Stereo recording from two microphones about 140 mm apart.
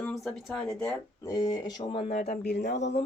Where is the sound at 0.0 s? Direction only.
5° left (ahead or behind); by 2.1 s 40° left (ahead or behind).